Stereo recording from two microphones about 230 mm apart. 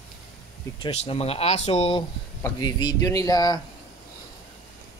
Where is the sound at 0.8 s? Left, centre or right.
Left.